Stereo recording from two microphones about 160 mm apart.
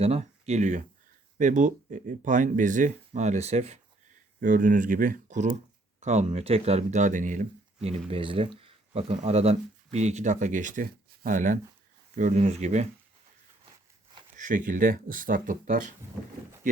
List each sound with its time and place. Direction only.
0.0 s speech: 40° right (ahead or behind)
4.4 s speech: 60° right (ahead or behind)
7.8 s speech: 40° right (ahead or behind)
14.3 s speech: 55° right (ahead or behind)